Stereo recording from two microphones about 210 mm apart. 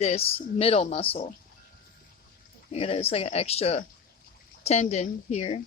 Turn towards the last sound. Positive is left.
turn(degrees=30)  # may be behind; listen again after turning